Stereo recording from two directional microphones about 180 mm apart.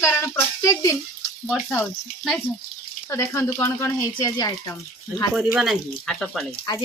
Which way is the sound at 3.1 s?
15° left (ahead or behind).